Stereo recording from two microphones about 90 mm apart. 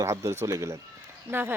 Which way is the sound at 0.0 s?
35° right (ahead or behind).